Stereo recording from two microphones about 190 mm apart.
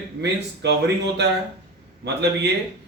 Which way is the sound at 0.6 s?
65° right (ahead or behind).